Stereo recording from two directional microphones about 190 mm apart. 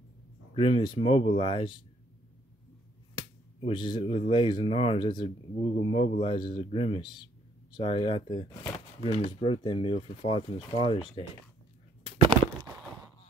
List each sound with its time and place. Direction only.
0.6 s speech: 30° left (ahead or behind)
3.6 s speech: 25° left (ahead or behind)